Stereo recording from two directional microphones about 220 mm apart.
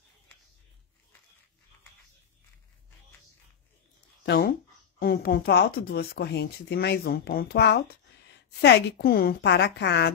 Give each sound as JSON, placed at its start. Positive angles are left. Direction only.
{"t": 4.9, "sound": "speech", "side_deg": 45}